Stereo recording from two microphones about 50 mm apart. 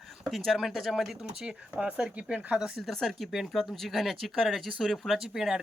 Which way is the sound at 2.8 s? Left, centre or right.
Centre.